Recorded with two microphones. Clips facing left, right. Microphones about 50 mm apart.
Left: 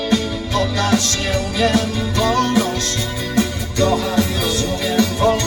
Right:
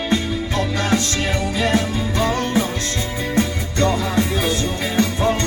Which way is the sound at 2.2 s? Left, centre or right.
Left.